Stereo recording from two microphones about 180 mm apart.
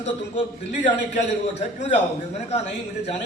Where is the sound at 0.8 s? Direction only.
40° left (ahead or behind).